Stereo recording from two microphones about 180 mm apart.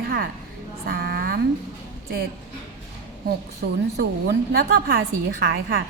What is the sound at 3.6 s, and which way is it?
A woman's voice, 60° right (ahead or behind).